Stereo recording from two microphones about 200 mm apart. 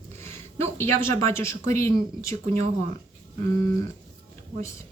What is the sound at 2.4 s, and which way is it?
Speech, 35° right (ahead or behind).